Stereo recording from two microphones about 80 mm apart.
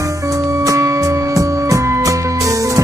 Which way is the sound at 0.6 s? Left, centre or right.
Right.